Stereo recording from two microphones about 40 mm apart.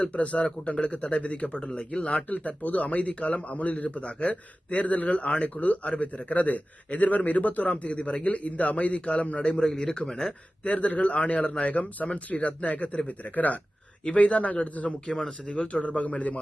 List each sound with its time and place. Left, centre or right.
0.0 s a man's voice: left; by 10.3 s centre
10.6 s speech: left
14.8 s a man's voice: centre
15.5 s speech: left